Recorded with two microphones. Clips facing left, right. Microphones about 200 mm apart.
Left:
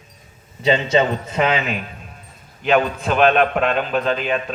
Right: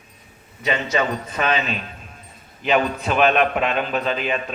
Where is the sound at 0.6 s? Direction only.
25° left (ahead or behind).